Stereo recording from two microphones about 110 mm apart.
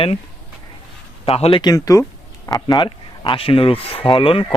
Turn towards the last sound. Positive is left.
turn(degrees=50)  # may be behind; listen again after turning